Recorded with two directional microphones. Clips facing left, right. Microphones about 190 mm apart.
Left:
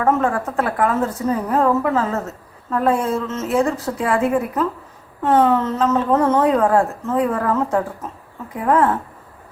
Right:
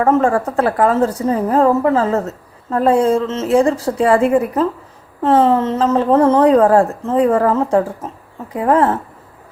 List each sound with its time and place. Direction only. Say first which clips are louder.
0.1 s a woman's voice: right 3 dB; 30° right (ahead or behind)